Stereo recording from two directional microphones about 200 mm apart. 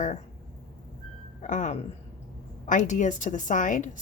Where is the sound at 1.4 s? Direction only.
40° left (ahead or behind).